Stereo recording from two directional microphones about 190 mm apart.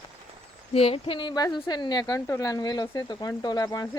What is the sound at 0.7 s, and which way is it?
Speech, 30° left (ahead or behind).